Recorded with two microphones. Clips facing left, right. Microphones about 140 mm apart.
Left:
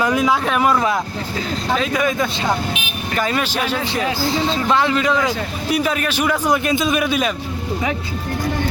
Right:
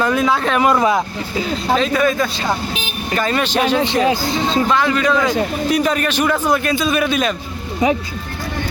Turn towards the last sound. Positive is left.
turn(degrees=10)  # may be behind; listen again after turning